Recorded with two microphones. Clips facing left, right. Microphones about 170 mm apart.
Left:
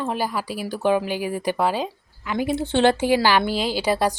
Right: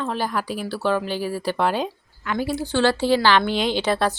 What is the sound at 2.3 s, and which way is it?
Speech, 20° left (ahead or behind).